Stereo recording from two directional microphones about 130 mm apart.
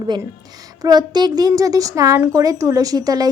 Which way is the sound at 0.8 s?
30° right (ahead or behind).